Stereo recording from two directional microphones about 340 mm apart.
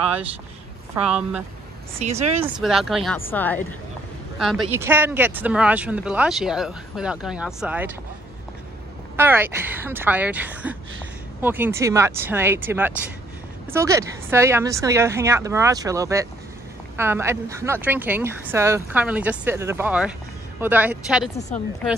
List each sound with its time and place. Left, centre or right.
1.0 s speech: centre
2.0 s speech: centre
2.4 s speech: centre
9.1 s speech: centre